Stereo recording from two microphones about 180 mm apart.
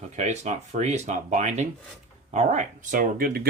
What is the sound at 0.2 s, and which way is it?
Speech, 40° right (ahead or behind).